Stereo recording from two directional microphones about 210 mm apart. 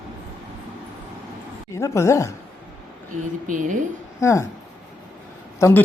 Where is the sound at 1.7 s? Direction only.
15° left (ahead or behind).